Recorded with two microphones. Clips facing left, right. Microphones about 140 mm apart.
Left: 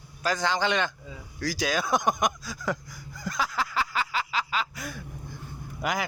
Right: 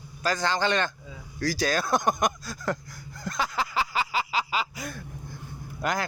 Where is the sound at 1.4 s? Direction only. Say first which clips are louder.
Right 2 dB; 15° left (ahead or behind).